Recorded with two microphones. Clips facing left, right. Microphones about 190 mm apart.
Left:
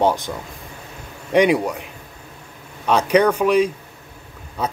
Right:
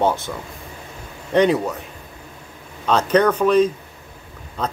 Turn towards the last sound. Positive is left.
turn(degrees=10)  # may be behind; listen again after turning